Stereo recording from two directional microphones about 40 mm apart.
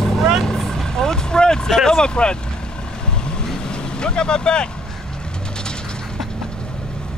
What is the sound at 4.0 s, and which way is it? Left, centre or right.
Vehicle, left.